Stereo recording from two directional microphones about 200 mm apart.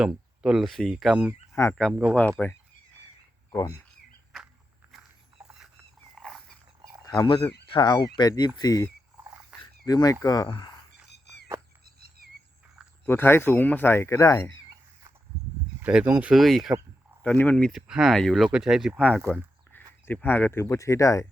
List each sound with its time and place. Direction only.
0.0 s speech: 5° right (ahead or behind)
1.5 s speech: 15° left (ahead or behind)
5.5 s a sound: centre (ahead or behind)
6.1 s dog: centre (ahead or behind)
7.2 s speech: 20° left (ahead or behind)
13.1 s speech: 10° left (ahead or behind)
15.8 s speech: 5° right (ahead or behind); by 21.2 s 15° left (ahead or behind)